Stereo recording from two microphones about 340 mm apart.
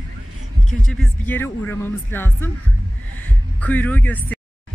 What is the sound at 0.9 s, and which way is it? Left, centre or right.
Speech, centre.